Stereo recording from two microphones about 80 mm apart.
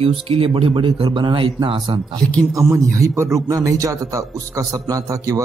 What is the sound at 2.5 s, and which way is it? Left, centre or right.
A man's voice, right.